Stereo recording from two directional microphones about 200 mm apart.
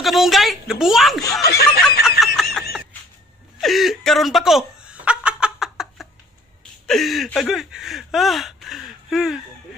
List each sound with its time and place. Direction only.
0.0 s a woman's voice: centre (ahead or behind)
1.4 s snicker: 50° left (ahead or behind)
2.0 s snicker: centre (ahead or behind)
3.6 s snicker: centre (ahead or behind)
6.9 s speech: centre (ahead or behind)